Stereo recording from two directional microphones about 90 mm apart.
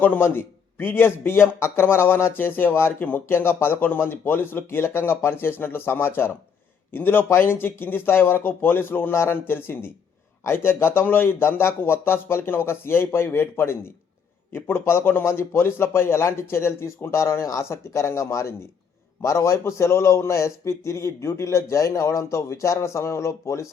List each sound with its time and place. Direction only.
0.0 s a man's voice: 25° left (ahead or behind)